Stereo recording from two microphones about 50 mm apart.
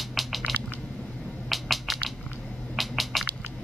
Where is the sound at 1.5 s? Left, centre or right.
Centre.